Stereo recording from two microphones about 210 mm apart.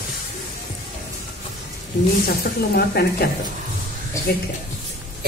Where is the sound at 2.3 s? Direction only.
45° left (ahead or behind).